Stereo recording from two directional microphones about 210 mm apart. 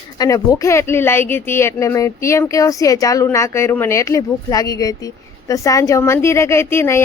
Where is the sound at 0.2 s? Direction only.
15° left (ahead or behind).